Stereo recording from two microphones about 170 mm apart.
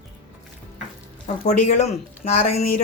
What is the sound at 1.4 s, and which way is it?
A woman's voice, 45° left (ahead or behind).